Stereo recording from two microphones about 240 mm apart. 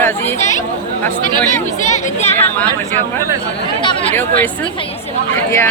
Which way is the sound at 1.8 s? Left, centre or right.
Left.